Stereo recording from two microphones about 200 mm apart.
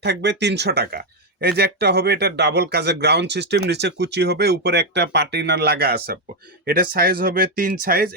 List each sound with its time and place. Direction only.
0.0 s speech: 60° right (ahead or behind)